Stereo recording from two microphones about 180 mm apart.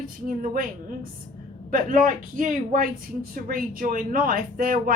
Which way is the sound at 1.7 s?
50° right (ahead or behind).